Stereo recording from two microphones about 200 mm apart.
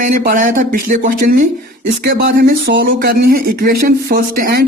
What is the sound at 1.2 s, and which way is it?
Speech, 50° right (ahead or behind).